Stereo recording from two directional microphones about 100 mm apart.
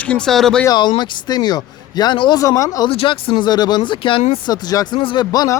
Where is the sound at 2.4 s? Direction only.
35° left (ahead or behind).